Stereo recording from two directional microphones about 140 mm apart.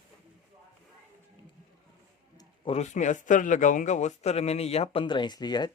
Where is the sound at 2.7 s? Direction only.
55° left (ahead or behind).